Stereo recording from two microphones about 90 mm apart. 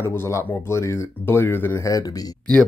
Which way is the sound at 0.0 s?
30° left (ahead or behind).